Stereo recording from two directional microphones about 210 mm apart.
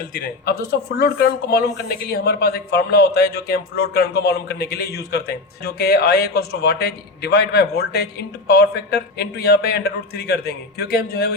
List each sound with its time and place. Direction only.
0.1 s speech: 45° left (ahead or behind)